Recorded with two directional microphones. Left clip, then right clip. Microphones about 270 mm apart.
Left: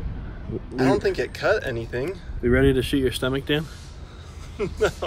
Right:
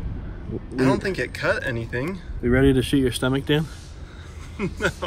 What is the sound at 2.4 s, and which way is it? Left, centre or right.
Speech, centre.